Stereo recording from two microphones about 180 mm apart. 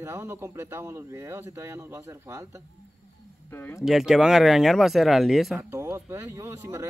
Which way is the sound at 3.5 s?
15° left (ahead or behind).